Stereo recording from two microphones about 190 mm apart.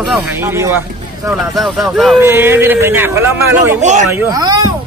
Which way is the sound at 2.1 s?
10° right (ahead or behind).